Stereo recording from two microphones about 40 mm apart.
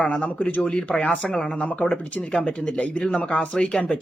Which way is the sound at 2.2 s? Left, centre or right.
Left.